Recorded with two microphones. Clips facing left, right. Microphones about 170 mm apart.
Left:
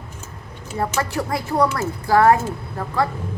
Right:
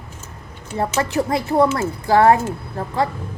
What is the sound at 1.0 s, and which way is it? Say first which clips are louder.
Child singing: right 4 dB; 20° right (ahead or behind).